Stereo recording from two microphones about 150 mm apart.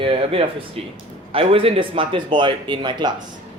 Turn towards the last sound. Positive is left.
turn(degrees=-30)  # may be behind; listen again after turning